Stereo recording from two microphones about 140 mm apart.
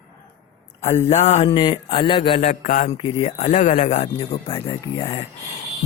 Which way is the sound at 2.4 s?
85° left.